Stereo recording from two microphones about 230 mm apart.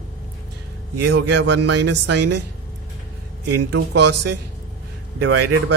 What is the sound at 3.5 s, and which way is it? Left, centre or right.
Speech, right.